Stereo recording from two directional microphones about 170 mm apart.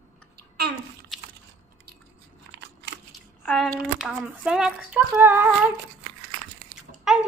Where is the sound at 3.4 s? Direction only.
Centre (ahead or behind).